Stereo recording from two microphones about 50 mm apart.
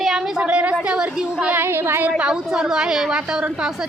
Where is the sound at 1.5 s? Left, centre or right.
Right.